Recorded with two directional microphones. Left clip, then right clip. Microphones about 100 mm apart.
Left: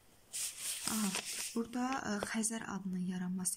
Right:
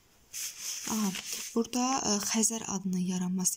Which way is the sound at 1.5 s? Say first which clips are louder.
Right 10 dB; 30° right (ahead or behind).